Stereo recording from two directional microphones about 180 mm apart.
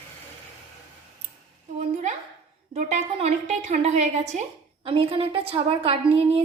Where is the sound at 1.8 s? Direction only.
40° right (ahead or behind).